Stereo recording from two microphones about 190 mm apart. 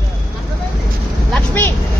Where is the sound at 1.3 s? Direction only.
10° left (ahead or behind).